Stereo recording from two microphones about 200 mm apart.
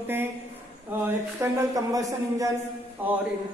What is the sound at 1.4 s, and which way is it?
Speech, 15° right (ahead or behind).